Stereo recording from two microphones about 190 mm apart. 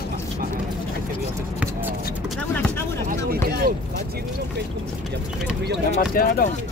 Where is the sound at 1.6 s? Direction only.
10° right (ahead or behind).